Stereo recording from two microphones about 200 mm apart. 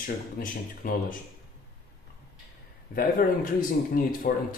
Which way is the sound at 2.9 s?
45° left (ahead or behind).